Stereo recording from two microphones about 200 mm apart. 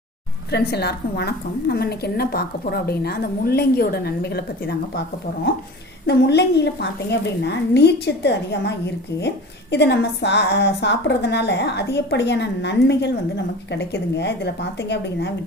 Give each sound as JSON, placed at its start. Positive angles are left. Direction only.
{"t": 0.5, "sound": "a woman's voice", "side_deg": 55}
{"t": 6.1, "sound": "a woman's voice", "side_deg": 55}
{"t": 9.7, "sound": "a woman's voice", "side_deg": 60}